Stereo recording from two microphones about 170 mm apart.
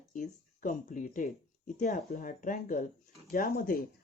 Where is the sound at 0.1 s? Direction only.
50° left (ahead or behind).